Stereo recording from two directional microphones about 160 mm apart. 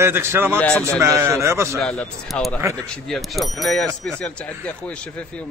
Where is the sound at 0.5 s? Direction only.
5° left (ahead or behind).